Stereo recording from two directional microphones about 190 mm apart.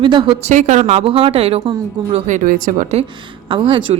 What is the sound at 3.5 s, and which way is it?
Speech, 25° right (ahead or behind).